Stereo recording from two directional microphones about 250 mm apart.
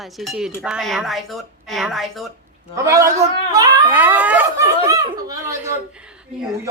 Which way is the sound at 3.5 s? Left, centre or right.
Centre.